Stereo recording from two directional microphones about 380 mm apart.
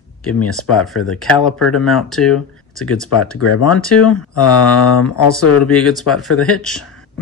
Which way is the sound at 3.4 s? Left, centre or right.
Left.